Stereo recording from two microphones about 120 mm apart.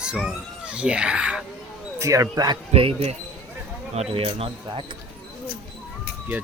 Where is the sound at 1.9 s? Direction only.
25° right (ahead or behind).